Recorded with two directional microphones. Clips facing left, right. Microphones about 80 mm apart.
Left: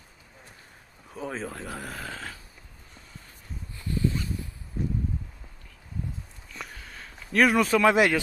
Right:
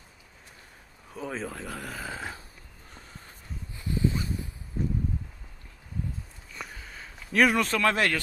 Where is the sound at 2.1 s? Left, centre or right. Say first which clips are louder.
Right 2 dB; centre.